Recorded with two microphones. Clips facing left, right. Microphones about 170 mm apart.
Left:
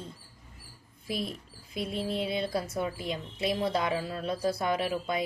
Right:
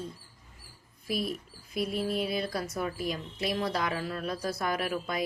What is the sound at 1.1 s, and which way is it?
A woman's voice, 25° left (ahead or behind).